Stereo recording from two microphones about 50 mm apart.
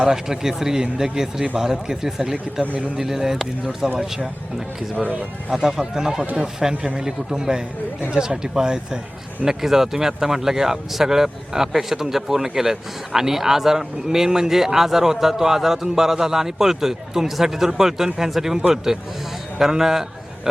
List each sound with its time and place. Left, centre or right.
0.0 s a man's voice: centre
4.9 s speech: right
5.5 s a man's voice: centre